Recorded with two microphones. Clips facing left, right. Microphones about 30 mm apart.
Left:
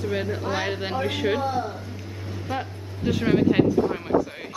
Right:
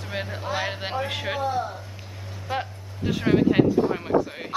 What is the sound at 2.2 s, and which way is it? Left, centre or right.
Vehicle, centre.